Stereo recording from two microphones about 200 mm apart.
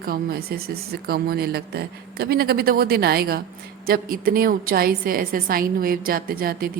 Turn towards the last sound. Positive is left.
turn(degrees=-45)  # may be behind; listen again after turning